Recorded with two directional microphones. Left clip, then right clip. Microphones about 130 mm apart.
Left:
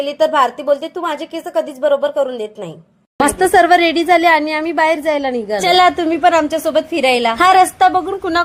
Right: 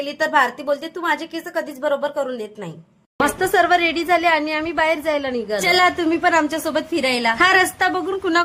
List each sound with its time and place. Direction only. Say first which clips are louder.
0.0 s a woman's voice: left 5 dB; 15° left (ahead or behind)
3.2 s speech: left 6 dB; 35° left (ahead or behind)